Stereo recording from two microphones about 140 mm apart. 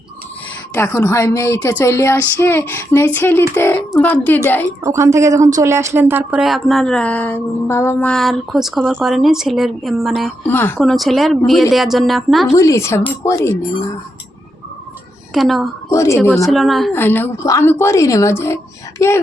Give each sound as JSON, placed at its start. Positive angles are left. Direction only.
{"t": 0.7, "sound": "a woman's voice", "side_deg": 20}
{"t": 4.8, "sound": "a woman's voice", "side_deg": -20}
{"t": 6.4, "sound": "speech", "side_deg": 0}
{"t": 10.4, "sound": "a woman's voice", "side_deg": 15}
{"t": 10.8, "sound": "speech", "side_deg": 0}
{"t": 12.5, "sound": "speech", "side_deg": 20}
{"t": 15.3, "sound": "a woman's voice", "side_deg": 0}
{"t": 15.9, "sound": "speech", "side_deg": 20}
{"t": 16.5, "sound": "speech", "side_deg": 0}
{"t": 16.9, "sound": "a woman's voice", "side_deg": 15}